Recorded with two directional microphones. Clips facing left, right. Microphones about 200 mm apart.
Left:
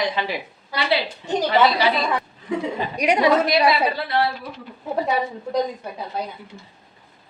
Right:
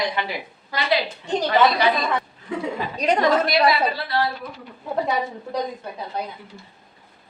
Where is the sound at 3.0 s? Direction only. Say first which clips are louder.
Left 1 dB; 10° left (ahead or behind).